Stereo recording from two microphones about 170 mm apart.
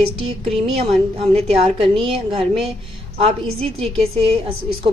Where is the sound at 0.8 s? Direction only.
35° right (ahead or behind).